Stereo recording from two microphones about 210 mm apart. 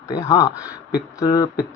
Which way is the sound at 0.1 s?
15° left (ahead or behind).